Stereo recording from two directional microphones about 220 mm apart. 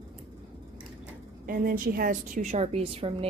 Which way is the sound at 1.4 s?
40° right (ahead or behind).